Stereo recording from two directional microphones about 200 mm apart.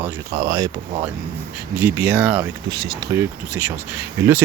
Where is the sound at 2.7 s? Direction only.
20° right (ahead or behind).